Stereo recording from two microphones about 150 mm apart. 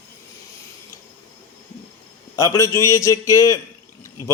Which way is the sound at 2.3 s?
20° left (ahead or behind).